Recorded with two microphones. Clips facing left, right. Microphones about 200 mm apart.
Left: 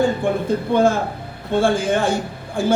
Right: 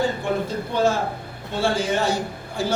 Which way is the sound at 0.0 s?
50° left (ahead or behind).